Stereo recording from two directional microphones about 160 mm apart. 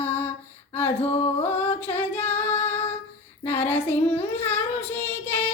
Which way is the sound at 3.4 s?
10° left (ahead or behind).